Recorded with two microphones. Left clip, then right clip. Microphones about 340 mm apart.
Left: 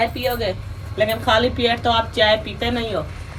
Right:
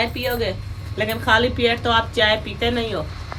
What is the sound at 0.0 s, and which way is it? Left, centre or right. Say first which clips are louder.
A woman's voice: left 2 dB; centre.